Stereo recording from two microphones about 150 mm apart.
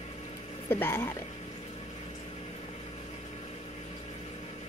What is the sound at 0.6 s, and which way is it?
Speech, 15° left (ahead or behind).